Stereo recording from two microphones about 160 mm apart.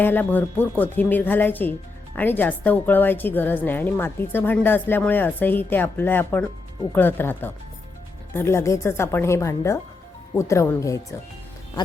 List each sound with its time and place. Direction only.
0.0 s a woman's voice: 10° left (ahead or behind)